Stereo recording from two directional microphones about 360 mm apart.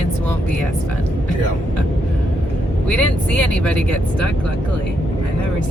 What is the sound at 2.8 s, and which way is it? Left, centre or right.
Speech, centre.